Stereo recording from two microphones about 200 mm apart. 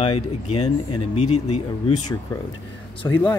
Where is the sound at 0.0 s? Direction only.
30° left (ahead or behind).